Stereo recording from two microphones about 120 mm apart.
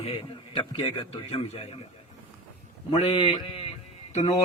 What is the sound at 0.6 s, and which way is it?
A man's voice, 45° left (ahead or behind).